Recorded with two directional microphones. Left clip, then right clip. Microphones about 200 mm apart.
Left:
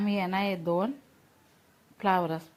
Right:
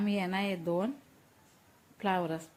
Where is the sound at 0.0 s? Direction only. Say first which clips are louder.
Left 4 dB; 5° left (ahead or behind).